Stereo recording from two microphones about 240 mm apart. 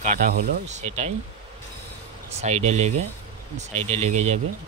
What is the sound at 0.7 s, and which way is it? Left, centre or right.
Speech, right.